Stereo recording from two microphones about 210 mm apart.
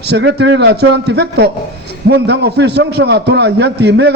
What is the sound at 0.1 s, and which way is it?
A man's voice, 55° right (ahead or behind).